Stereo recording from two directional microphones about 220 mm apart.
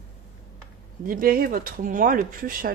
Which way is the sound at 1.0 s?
40° right (ahead or behind).